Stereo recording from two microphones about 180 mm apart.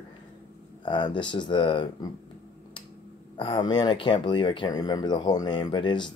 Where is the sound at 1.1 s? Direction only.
25° left (ahead or behind).